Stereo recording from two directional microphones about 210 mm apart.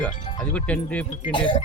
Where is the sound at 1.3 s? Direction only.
25° left (ahead or behind).